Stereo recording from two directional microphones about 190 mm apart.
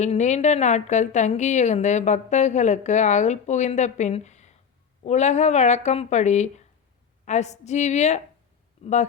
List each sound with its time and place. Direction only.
0.0 s a woman's voice: 40° left (ahead or behind)